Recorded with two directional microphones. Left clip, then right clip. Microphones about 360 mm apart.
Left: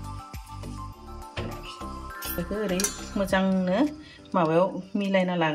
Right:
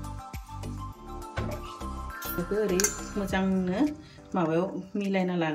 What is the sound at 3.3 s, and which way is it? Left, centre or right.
Speech, centre.